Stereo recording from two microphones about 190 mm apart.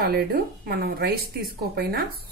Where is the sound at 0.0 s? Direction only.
55° right (ahead or behind).